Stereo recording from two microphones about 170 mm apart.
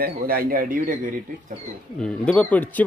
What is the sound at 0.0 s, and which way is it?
Speech, 60° right (ahead or behind).